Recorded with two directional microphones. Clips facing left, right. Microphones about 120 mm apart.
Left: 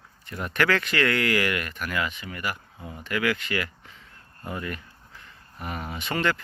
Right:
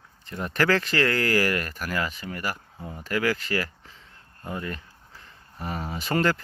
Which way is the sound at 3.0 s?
35° right (ahead or behind).